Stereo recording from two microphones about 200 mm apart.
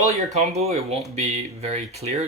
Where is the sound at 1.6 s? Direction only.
30° right (ahead or behind).